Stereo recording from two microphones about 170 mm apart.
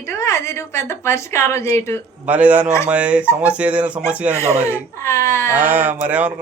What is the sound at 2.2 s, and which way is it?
A man's voice, 10° right (ahead or behind).